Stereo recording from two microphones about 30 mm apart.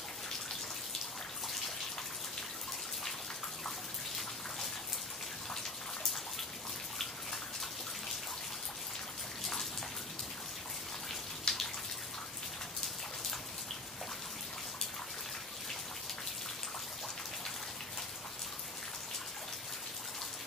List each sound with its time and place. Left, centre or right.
11.5 s bathtub: centre